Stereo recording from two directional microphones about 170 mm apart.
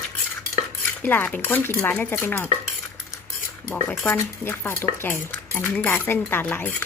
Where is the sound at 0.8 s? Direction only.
10° left (ahead or behind).